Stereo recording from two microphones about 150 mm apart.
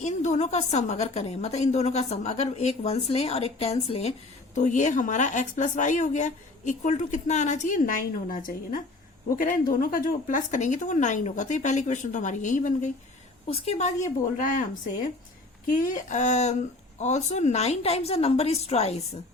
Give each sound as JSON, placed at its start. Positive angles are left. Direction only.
{"t": 0.0, "sound": "a woman's voice", "side_deg": 50}
{"t": 4.5, "sound": "a woman's voice", "side_deg": 55}
{"t": 15.6, "sound": "a woman's voice", "side_deg": 60}